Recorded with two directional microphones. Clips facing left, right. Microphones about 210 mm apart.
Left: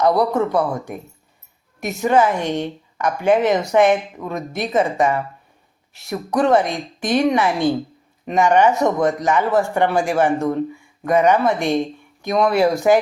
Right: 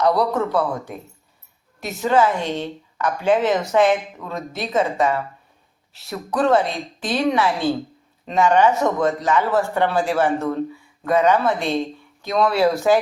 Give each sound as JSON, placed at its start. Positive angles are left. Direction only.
{"t": 0.0, "sound": "a woman's voice", "side_deg": 15}